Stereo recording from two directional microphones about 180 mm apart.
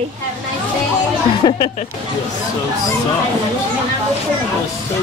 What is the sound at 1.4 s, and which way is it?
Speech, 35° left (ahead or behind).